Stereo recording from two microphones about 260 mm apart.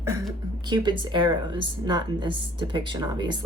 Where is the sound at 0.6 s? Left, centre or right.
Centre.